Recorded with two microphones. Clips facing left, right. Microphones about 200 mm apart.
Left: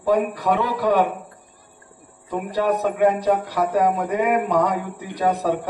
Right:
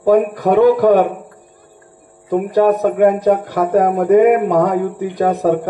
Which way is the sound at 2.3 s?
50° right (ahead or behind).